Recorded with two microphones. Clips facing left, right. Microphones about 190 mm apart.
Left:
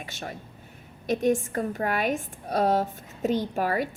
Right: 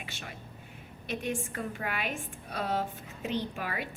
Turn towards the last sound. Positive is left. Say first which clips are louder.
# left 8 dB
turn(degrees=40)  # may be behind; listen again after turning